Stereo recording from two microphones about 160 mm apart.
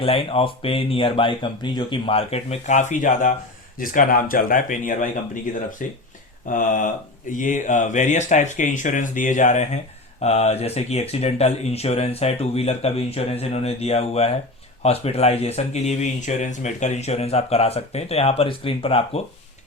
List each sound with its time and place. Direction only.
0.0 s speech: 35° left (ahead or behind)
2.9 s speech: 55° left (ahead or behind); by 19.2 s 35° left (ahead or behind)